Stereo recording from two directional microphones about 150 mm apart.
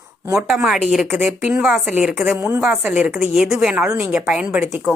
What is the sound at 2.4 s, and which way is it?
A woman's voice, 15° right (ahead or behind).